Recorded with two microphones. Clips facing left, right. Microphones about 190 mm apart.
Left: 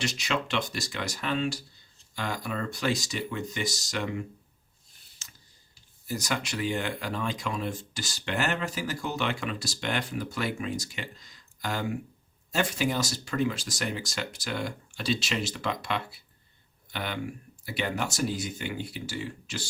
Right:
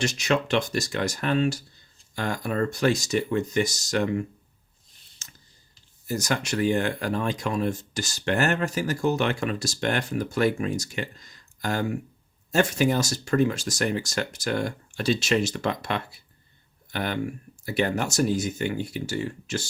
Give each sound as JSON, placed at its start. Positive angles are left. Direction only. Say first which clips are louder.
{"t": 0.0, "sound": "speech", "louder": "right 6 dB", "side_deg": -45}
{"t": 6.1, "sound": "speech", "louder": "right 5 dB", "side_deg": -45}